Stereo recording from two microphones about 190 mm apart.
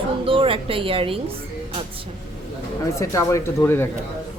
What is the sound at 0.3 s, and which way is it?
Speech, 25° right (ahead or behind).